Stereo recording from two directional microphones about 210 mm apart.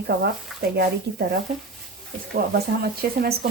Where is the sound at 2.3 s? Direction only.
50° right (ahead or behind).